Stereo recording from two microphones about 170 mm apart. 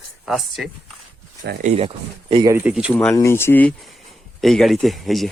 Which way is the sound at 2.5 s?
5° right (ahead or behind).